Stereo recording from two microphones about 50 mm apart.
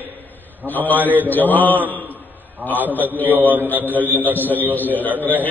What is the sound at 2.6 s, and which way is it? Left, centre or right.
A man's voice, right.